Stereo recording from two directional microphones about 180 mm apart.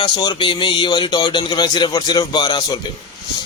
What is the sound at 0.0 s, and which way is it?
Speech, 25° left (ahead or behind).